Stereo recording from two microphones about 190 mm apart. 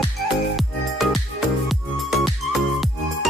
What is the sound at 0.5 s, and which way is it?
Music, centre (ahead or behind).